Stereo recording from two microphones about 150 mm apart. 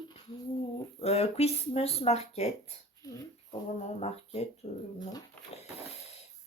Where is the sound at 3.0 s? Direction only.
25° left (ahead or behind).